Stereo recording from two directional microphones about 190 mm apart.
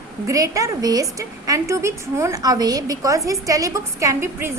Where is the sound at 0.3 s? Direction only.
15° right (ahead or behind).